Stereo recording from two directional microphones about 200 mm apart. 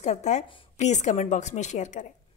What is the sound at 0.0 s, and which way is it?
A woman's voice, 35° left (ahead or behind).